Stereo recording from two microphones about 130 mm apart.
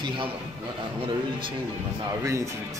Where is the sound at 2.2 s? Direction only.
25° right (ahead or behind).